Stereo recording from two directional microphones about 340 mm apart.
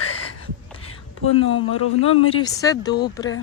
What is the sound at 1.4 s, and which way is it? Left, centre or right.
Speech, left.